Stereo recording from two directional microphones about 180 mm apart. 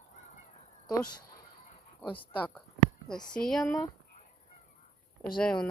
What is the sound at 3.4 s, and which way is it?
Speech, centre (ahead or behind).